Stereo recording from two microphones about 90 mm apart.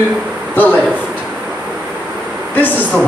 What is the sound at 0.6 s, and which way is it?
Speech, 20° left (ahead or behind).